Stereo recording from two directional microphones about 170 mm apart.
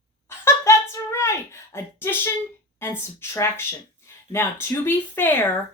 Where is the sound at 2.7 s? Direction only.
15° left (ahead or behind).